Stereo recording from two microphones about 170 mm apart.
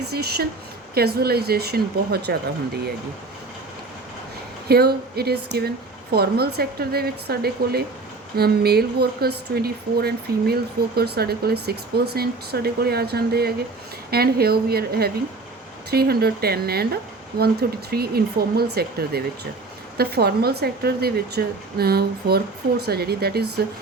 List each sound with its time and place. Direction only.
0.1 s speech: 70° right (ahead or behind)
4.7 s speech: 65° right (ahead or behind)